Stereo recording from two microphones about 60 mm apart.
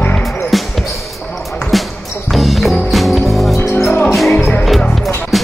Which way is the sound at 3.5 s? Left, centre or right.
Left.